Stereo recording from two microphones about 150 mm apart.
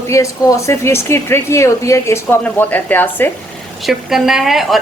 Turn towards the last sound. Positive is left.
turn(degrees=0)  # may be behind; listen again after turning